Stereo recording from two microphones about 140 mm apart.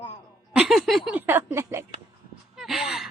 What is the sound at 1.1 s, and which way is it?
Speech, 15° right (ahead or behind).